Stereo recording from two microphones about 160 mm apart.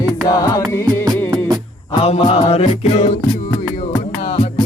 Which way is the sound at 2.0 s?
40° left (ahead or behind).